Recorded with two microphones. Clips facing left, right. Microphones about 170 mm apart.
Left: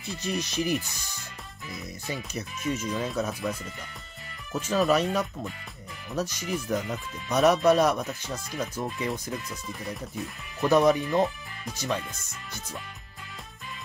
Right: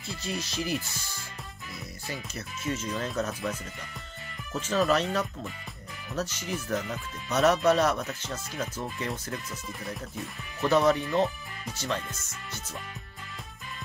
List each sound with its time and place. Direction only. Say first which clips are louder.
0.0 s speech: left 4 dB; 15° left (ahead or behind)
2.9 s speech: left 2 dB; 5° left (ahead or behind)
9.8 s speech: left 2 dB; centre (ahead or behind)
10.7 s speech: left 2 dB; 10° left (ahead or behind)